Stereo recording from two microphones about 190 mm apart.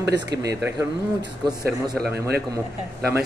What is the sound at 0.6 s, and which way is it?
Speech, 15° right (ahead or behind).